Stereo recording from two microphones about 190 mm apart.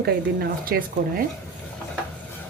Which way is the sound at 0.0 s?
50° right (ahead or behind).